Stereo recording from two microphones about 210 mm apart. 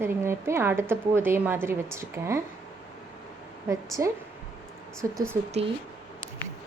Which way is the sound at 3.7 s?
15° right (ahead or behind).